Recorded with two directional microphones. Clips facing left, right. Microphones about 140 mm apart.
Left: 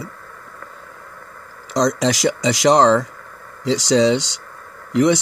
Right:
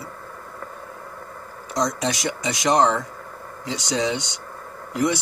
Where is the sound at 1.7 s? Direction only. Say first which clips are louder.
Left 6 dB; 90° left.